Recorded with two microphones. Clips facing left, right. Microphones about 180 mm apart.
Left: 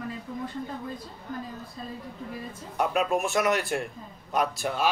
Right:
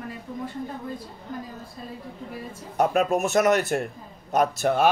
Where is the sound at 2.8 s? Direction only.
45° right (ahead or behind).